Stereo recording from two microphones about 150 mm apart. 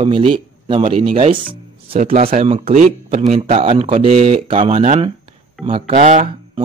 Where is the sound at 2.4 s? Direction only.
45° right (ahead or behind).